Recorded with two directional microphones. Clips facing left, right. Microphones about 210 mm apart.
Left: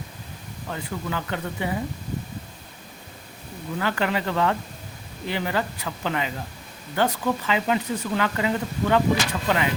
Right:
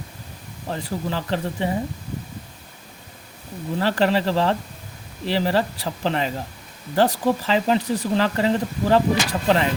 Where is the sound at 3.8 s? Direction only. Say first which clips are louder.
Right 5 dB; 35° right (ahead or behind).